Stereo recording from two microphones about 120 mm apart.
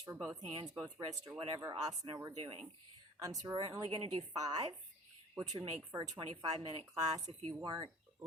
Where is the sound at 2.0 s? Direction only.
40° right (ahead or behind).